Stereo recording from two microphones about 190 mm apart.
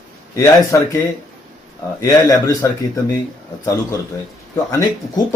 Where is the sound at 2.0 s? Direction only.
20° left (ahead or behind).